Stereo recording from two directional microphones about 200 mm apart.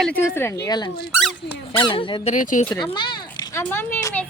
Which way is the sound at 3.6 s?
10° left (ahead or behind).